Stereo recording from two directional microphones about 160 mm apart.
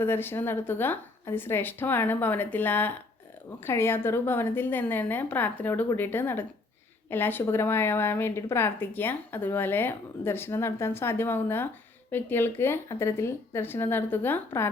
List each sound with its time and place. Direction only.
0.0 s a woman's voice: 15° left (ahead or behind)